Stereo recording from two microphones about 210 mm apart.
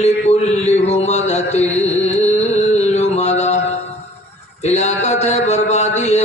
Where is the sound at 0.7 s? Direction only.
30° left (ahead or behind).